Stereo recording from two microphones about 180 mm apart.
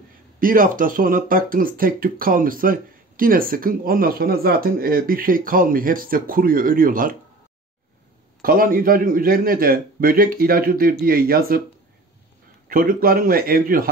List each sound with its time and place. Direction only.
0.4 s speech: 50° right (ahead or behind)
8.4 s speech: 55° right (ahead or behind)
12.6 s speech: 50° right (ahead or behind)